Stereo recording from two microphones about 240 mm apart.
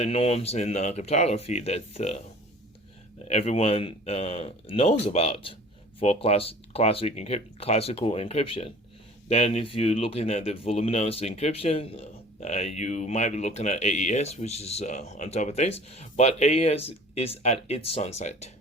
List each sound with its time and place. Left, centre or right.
0.0 s speech: left
3.2 s speech: left